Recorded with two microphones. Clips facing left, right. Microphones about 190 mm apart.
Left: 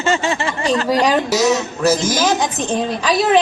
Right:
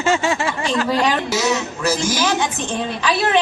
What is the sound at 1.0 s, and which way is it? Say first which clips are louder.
A woman's voice: left 4 dB; 40° left (ahead or behind).